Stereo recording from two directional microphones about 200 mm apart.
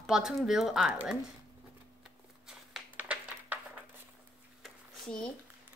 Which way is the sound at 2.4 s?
5° right (ahead or behind).